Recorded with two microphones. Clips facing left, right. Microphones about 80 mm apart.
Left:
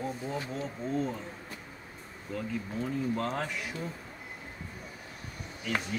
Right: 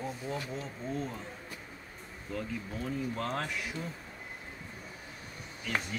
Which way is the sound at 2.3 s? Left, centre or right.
Centre.